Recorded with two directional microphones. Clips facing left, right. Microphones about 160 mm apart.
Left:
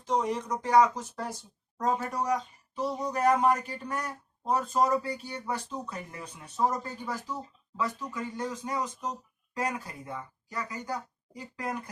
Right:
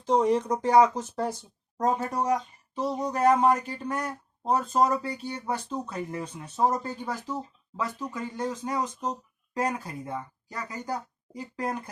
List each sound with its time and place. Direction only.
0.0 s speech: 30° right (ahead or behind)